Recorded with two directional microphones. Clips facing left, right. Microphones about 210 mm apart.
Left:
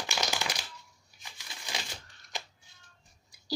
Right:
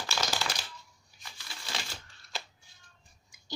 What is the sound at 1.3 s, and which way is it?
Crumpling, 15° left (ahead or behind).